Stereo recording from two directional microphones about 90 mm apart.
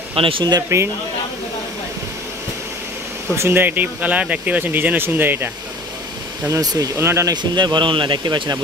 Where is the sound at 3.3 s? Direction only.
25° right (ahead or behind).